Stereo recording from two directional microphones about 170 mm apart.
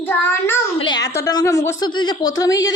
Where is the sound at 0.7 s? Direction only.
25° left (ahead or behind).